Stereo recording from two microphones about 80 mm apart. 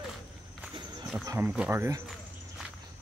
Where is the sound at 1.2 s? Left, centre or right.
Right.